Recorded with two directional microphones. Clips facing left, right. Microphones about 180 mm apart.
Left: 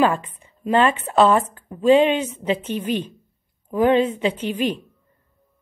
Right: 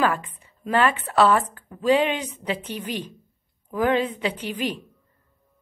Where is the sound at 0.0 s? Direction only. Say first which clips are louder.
Left 4 dB; 25° left (ahead or behind).